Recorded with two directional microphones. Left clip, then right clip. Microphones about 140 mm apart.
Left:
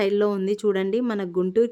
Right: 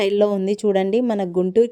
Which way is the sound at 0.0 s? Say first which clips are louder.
Right 4 dB; 25° right (ahead or behind).